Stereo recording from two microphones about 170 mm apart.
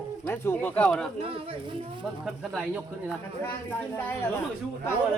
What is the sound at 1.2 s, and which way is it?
Speech, 35° right (ahead or behind).